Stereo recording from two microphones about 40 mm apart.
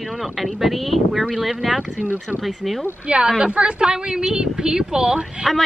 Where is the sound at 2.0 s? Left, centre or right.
Right.